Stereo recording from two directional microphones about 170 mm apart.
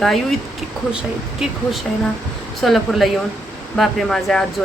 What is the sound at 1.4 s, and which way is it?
A woman's voice, centre (ahead or behind).